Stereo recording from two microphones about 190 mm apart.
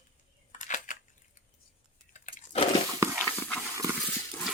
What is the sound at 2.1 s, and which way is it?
Crunch, 40° left (ahead or behind).